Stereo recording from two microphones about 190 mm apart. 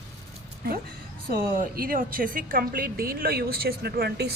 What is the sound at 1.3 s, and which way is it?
A woman's voice, 50° right (ahead or behind).